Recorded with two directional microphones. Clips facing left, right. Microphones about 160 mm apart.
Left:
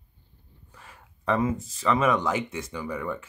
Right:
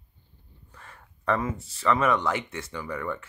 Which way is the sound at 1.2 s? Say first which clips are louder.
Left 2 dB; 20° left (ahead or behind).